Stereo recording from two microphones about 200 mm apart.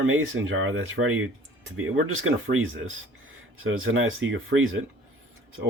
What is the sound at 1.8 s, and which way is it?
Speech, 90° right.